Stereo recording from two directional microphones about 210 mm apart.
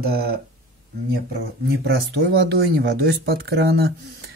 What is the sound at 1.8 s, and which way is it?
Speech, 50° right (ahead or behind).